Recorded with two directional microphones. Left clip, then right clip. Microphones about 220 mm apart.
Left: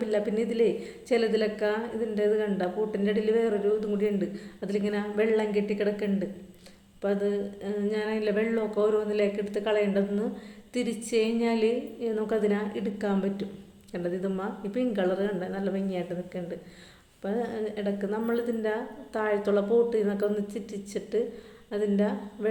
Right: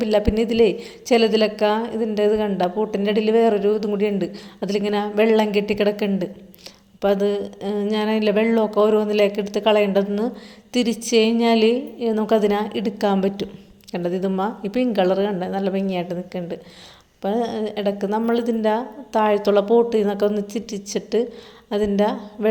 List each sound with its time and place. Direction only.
0.0 s a woman's voice: 35° right (ahead or behind)